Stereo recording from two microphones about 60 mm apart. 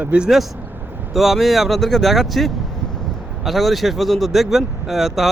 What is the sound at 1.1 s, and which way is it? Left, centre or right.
Speech, centre.